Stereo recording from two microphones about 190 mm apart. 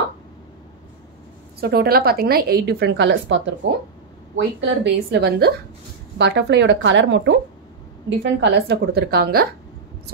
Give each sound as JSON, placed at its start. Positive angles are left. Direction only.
{"t": 1.6, "sound": "a woman's voice", "side_deg": -55}
{"t": 4.6, "sound": "a woman's voice", "side_deg": -65}